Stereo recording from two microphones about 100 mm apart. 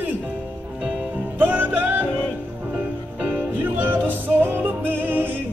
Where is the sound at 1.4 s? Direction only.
20° right (ahead or behind).